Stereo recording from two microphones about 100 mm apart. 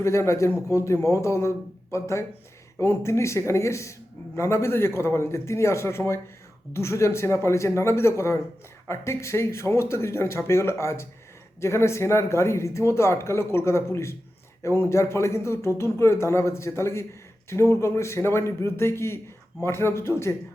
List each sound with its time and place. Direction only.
0.0 s speech: 30° left (ahead or behind)